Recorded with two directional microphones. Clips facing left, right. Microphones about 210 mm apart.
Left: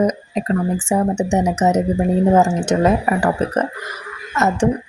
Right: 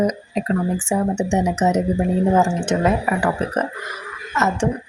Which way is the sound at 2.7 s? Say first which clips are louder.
Left 4 dB; 40° left (ahead or behind).